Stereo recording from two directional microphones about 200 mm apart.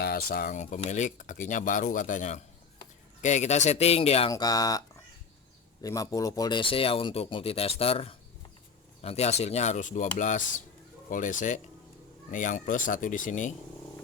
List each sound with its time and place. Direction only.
0.0 s speech: 50° left (ahead or behind); by 4.3 s 30° left (ahead or behind)
4.3 s speech: 20° left (ahead or behind)
5.8 s speech: 15° left (ahead or behind); by 13.5 s 40° left (ahead or behind)